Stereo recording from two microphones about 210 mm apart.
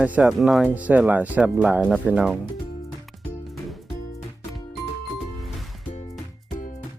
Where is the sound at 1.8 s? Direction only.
5° left (ahead or behind).